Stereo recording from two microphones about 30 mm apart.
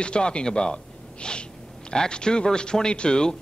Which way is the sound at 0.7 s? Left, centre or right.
Left.